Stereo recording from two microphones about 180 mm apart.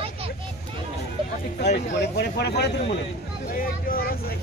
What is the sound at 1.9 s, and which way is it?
Speech, 70° left (ahead or behind).